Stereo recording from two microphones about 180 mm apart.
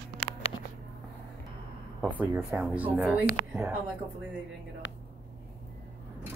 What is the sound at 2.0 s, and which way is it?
Speech, 10° right (ahead or behind).